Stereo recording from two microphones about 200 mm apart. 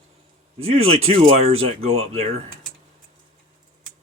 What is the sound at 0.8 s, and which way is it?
Speech, 30° right (ahead or behind).